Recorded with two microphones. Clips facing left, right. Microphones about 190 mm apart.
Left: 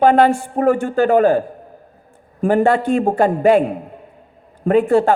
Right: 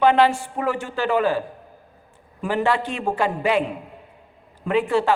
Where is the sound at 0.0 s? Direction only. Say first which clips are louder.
Left 4 dB; 45° left (ahead or behind).